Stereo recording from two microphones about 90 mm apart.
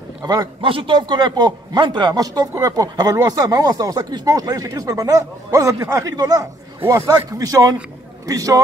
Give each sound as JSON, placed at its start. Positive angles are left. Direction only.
{"t": 0.2, "sound": "speech", "side_deg": -45}
{"t": 0.6, "sound": "a man's voice", "side_deg": -75}
{"t": 6.8, "sound": "a man's voice", "side_deg": -25}
{"t": 7.1, "sound": "a man's voice", "side_deg": -40}